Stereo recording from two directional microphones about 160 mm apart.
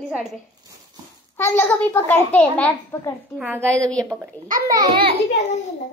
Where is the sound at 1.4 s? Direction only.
15° left (ahead or behind).